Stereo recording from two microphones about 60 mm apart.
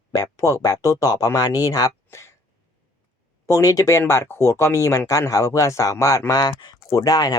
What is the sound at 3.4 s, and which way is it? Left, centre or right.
Speech, left.